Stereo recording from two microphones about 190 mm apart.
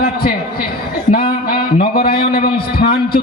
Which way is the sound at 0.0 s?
55° left (ahead or behind).